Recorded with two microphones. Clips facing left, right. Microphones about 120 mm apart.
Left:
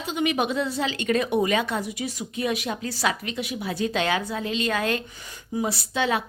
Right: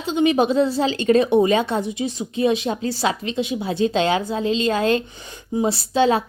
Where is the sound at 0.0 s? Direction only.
30° right (ahead or behind).